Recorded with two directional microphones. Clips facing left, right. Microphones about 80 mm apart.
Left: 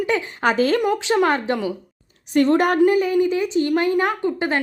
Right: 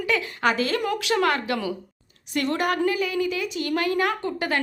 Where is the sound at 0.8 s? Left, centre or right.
Left.